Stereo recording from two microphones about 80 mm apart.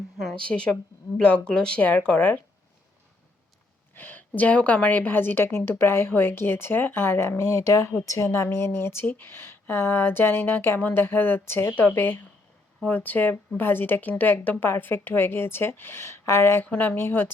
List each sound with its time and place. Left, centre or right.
0.4 s a woman's voice: centre
3.9 s a woman's voice: left
8.3 s a woman's voice: left